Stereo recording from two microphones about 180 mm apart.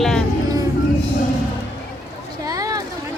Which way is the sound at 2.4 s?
20° right (ahead or behind).